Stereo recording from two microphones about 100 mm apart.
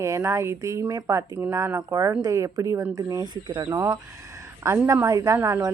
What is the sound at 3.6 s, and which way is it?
Speech, 25° right (ahead or behind).